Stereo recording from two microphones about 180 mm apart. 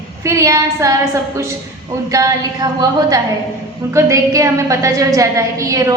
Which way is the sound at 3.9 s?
15° right (ahead or behind).